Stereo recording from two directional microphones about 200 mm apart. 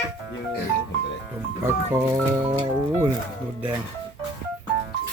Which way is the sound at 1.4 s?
10° right (ahead or behind).